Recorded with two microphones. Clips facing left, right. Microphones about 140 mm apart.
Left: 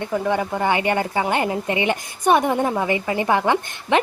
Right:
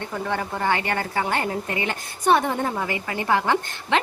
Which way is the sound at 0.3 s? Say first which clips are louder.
Left 3 dB; 15° left (ahead or behind).